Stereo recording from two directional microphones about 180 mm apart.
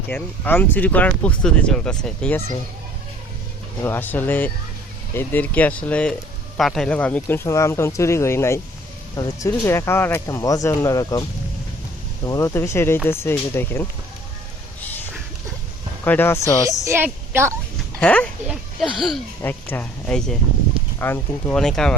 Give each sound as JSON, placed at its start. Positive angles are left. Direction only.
{"t": 0.1, "sound": "speech", "side_deg": 10}
{"t": 3.8, "sound": "speech", "side_deg": 10}
{"t": 16.0, "sound": "speech", "side_deg": 10}
{"t": 16.6, "sound": "a woman's voice", "side_deg": -15}
{"t": 18.0, "sound": "speech", "side_deg": 10}
{"t": 19.4, "sound": "speech", "side_deg": 10}